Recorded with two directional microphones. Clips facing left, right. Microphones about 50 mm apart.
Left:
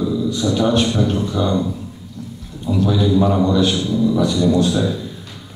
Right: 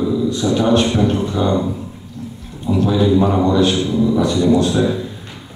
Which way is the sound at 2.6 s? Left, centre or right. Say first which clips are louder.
Right 2 dB; right.